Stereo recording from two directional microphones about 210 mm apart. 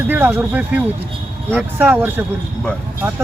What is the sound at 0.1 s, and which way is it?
Speech, 10° right (ahead or behind).